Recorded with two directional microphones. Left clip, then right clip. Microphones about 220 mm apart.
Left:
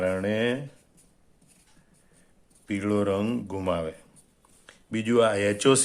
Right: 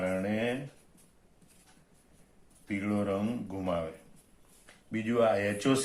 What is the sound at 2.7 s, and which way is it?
Speech, 45° left (ahead or behind).